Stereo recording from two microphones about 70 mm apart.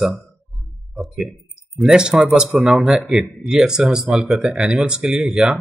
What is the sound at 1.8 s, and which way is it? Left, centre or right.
A man's voice, centre.